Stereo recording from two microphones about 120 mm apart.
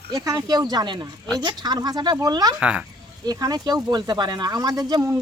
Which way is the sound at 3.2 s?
30° right (ahead or behind).